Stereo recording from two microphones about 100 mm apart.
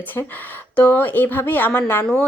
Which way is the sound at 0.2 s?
30° left (ahead or behind).